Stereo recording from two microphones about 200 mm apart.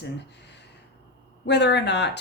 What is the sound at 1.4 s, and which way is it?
Speech, 60° left (ahead or behind).